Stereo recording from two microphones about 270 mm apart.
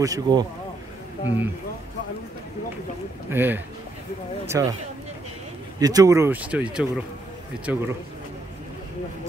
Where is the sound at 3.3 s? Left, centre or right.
Centre.